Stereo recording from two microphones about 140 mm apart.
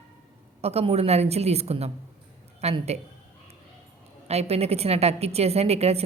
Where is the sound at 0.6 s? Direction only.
45° right (ahead or behind).